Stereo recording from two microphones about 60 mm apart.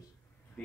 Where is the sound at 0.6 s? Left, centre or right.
Centre.